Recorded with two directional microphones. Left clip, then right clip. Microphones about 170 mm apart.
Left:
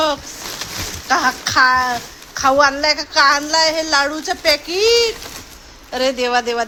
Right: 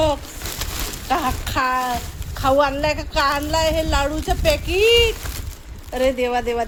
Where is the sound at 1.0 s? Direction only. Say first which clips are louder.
Left 6 dB; 15° right (ahead or behind).